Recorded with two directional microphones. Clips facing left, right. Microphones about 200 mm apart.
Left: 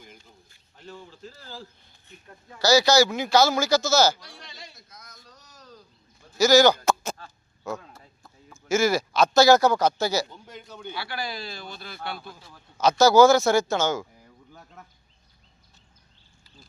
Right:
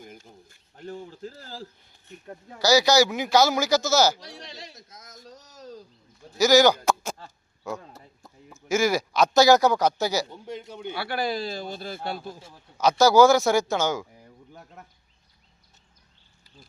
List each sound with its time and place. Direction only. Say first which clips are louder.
0.0 s a sound: right 5 dB; 50° right (ahead or behind)
2.6 s speech: even; 15° right (ahead or behind)
4.2 s chop: right 5 dB; 40° right (ahead or behind)
5.0 s a sound: right 6 dB; 45° right (ahead or behind)
6.3 s speech: even; 15° right (ahead or behind)
7.8 s a sound: right 3 dB; 30° right (ahead or behind)
8.4 s speech: left 1 dB; 15° right (ahead or behind)
10.2 s speech: right 7 dB; 30° right (ahead or behind)
10.9 s a man's voice: right 6 dB; 55° right (ahead or behind); by 12.5 s 30° right (ahead or behind)
12.8 s speech: left 1 dB; 10° right (ahead or behind)